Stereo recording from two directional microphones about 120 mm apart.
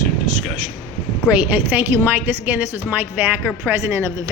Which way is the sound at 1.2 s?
15° right (ahead or behind).